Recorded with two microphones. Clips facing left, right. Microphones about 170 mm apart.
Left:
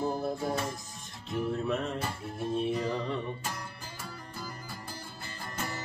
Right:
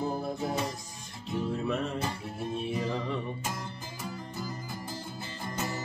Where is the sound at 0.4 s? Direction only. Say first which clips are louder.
Right 1 dB; 20° right (ahead or behind).